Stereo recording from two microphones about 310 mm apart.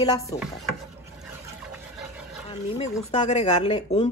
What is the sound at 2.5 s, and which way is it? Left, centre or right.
Speech, left.